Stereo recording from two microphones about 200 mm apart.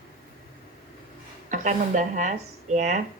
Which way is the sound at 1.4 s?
40° right (ahead or behind).